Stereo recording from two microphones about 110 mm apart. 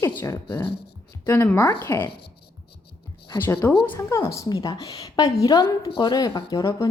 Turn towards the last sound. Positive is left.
turn(degrees=30)  # may be behind; listen again after turning